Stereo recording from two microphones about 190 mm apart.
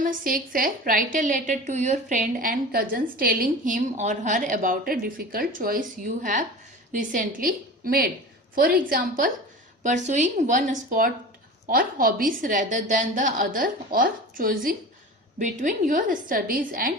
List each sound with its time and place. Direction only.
0.0 s a woman's voice: 45° right (ahead or behind)
9.8 s a woman's voice: 40° right (ahead or behind)